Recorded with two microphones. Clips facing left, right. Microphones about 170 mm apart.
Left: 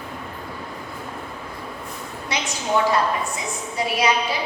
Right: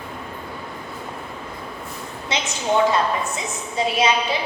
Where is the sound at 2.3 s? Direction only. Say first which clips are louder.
Right 1 dB; 25° right (ahead or behind).